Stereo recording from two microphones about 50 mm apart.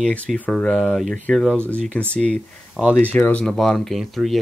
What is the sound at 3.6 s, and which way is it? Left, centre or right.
Speech, centre.